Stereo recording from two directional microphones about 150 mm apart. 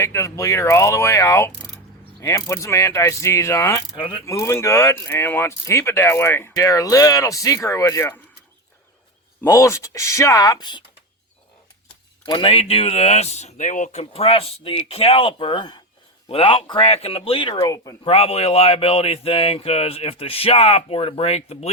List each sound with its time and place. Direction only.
0.0 s speech: 20° left (ahead or behind)
3.9 s speech: 35° left (ahead or behind)
4.3 s speech: 20° left (ahead or behind)
9.4 s speech: 20° left (ahead or behind)
12.2 s speech: 35° left (ahead or behind)
17.6 s speech: 20° left (ahead or behind)
18.0 s speech: 40° left (ahead or behind)